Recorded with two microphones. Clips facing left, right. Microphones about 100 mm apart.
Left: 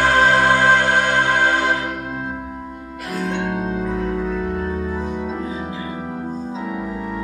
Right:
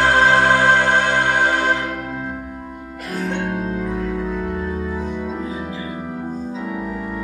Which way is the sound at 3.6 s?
20° left (ahead or behind).